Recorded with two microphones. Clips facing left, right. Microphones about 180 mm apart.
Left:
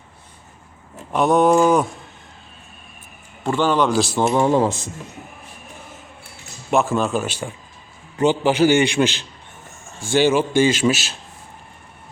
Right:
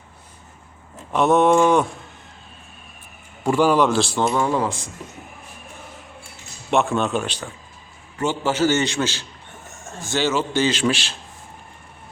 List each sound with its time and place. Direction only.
1.1 s a man's voice: centre (ahead or behind)
3.4 s a man's voice: 10° right (ahead or behind)
3.9 s a man's voice: 10° left (ahead or behind)
4.3 s speech: 25° left (ahead or behind)
6.7 s a man's voice: centre (ahead or behind)